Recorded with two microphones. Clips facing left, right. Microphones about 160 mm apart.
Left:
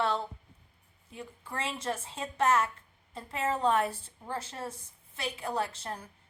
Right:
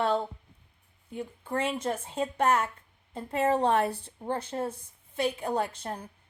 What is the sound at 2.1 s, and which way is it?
Speech, 30° right (ahead or behind).